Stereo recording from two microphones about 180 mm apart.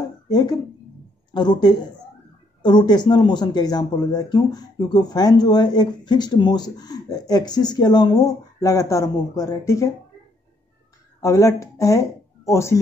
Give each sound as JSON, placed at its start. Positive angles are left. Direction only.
{"t": 0.3, "sound": "speech", "side_deg": 20}
{"t": 11.1, "sound": "speech", "side_deg": 20}